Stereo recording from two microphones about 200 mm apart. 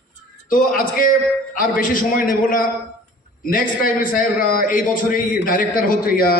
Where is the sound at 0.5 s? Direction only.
45° left (ahead or behind).